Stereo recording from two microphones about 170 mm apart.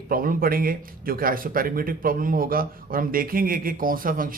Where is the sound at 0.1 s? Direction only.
60° right (ahead or behind).